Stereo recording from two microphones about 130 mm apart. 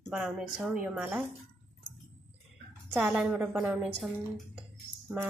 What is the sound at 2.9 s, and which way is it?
Speech, 10° right (ahead or behind).